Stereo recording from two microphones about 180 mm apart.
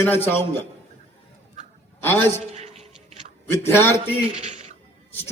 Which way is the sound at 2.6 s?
40° right (ahead or behind).